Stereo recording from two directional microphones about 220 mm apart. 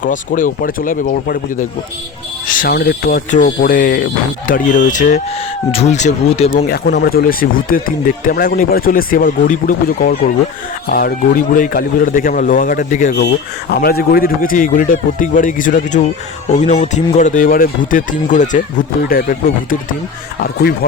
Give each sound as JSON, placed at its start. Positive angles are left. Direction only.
{"t": 0.0, "sound": "speech", "side_deg": 35}
{"t": 6.7, "sound": "speech", "side_deg": 45}
{"t": 13.7, "sound": "speech", "side_deg": 45}